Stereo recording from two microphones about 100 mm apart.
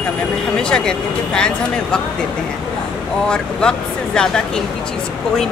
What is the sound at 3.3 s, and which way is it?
Speech, 10° left (ahead or behind).